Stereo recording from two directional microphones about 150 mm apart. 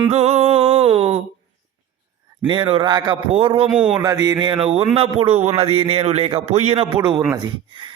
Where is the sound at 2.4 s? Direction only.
35° right (ahead or behind).